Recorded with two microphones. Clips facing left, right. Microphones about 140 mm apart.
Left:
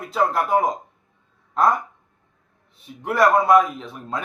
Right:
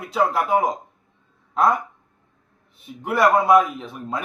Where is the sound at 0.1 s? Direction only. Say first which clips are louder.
Even; centre (ahead or behind).